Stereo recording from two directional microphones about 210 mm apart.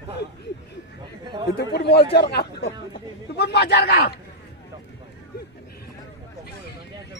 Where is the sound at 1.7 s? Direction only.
50° left (ahead or behind).